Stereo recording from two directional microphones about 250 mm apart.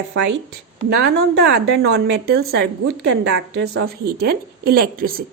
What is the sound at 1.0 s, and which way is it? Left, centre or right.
A woman's voice, right.